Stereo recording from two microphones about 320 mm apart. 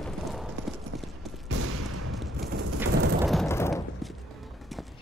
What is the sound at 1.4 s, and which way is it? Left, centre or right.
Fusillade, right.